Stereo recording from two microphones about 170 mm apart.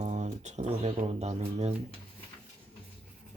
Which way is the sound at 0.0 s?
45° right (ahead or behind).